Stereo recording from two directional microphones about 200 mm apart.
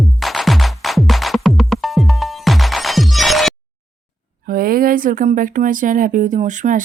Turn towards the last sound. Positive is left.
turn(degrees=-40)  # may be behind; listen again after turning